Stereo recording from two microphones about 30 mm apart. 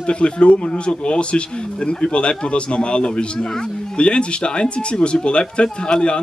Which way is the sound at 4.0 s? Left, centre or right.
Left.